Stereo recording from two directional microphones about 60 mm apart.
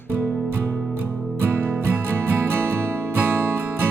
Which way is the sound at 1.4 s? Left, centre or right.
Right.